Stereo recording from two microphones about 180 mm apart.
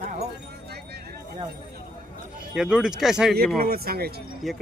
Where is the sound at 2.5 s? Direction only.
5° right (ahead or behind).